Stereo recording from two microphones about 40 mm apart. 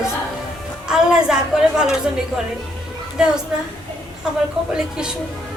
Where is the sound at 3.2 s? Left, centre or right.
Centre.